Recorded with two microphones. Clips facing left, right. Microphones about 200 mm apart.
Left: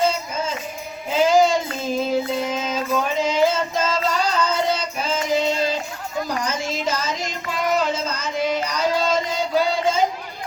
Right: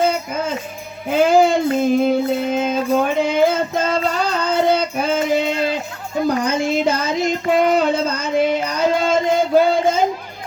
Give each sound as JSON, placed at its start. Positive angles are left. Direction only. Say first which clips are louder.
{"t": 0.0, "sound": "music", "louder": "right 3 dB", "side_deg": -55}
{"t": 1.1, "sound": "child singing", "louder": "right 3 dB", "side_deg": -55}